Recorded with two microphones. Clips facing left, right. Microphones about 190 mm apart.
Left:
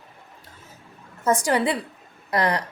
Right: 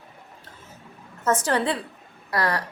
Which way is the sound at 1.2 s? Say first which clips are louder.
Left 2 dB; 10° left (ahead or behind).